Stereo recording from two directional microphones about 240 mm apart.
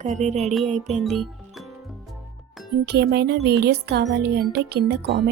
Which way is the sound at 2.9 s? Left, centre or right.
Right.